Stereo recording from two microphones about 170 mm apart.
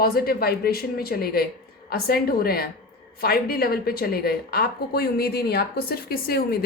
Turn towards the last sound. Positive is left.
turn(degrees=60)  # may be behind; listen again after turning